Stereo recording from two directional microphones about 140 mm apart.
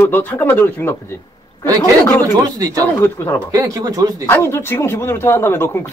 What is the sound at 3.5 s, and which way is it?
Speech, 25° right (ahead or behind).